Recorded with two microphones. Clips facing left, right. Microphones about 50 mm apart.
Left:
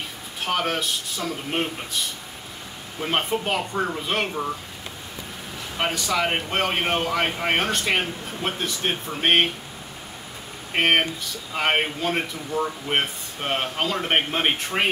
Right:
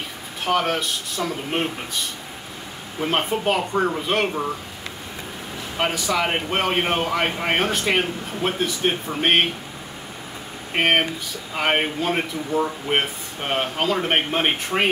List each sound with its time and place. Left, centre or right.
0.5 s speech: centre
3.0 s a man's voice: centre
5.8 s a man's voice: centre
10.7 s a man's voice: centre